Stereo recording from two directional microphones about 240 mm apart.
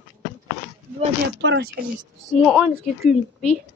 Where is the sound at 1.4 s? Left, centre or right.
Right.